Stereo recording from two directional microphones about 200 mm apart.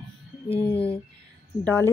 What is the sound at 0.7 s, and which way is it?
Speech, 30° left (ahead or behind).